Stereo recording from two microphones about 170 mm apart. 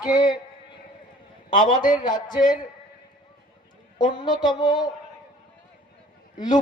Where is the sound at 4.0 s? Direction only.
25° left (ahead or behind).